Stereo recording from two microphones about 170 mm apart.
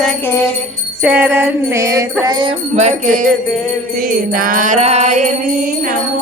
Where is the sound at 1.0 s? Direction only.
10° right (ahead or behind); by 2.5 s 25° right (ahead or behind).